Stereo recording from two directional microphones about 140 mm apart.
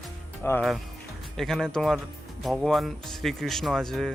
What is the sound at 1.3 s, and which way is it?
Speech, 5° left (ahead or behind).